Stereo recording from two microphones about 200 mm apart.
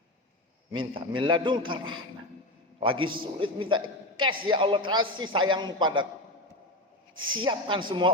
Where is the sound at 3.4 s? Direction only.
25° right (ahead or behind).